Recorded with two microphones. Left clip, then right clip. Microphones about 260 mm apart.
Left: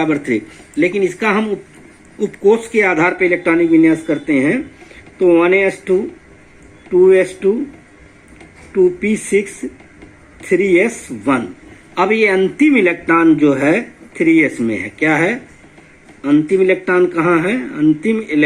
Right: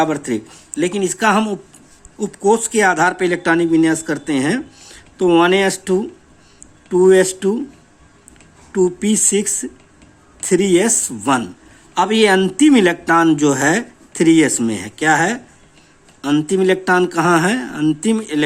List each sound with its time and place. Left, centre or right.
0.0 s a man's voice: right
6.9 s speech: right
8.7 s a man's voice: right
10.5 s a man's voice: right